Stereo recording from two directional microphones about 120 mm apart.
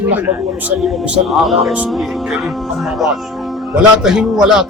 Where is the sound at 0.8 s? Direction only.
Centre (ahead or behind).